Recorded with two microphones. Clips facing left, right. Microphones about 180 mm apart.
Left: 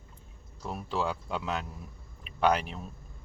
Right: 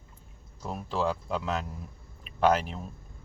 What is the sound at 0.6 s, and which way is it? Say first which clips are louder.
Speech: right 2 dB; centre (ahead or behind).